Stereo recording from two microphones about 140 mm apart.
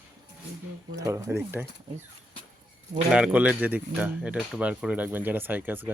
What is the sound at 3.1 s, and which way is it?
Speech, 10° right (ahead or behind).